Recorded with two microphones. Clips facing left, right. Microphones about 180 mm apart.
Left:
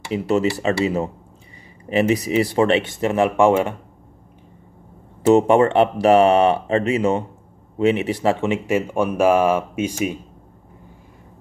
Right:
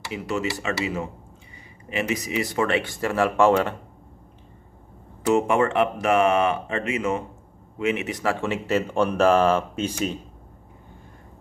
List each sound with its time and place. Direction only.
0.1 s speech: 35° left (ahead or behind); by 3.7 s 15° left (ahead or behind)
5.3 s speech: 35° left (ahead or behind); by 10.1 s 10° left (ahead or behind)